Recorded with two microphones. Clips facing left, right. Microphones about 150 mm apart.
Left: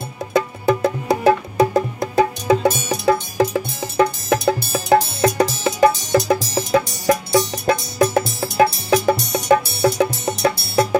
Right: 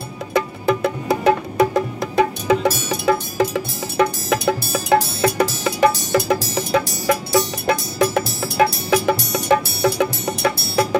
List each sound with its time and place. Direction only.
0.3 s music: 25° left (ahead or behind)